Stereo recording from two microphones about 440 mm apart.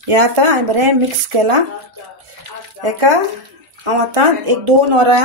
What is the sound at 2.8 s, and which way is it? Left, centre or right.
Speech, right.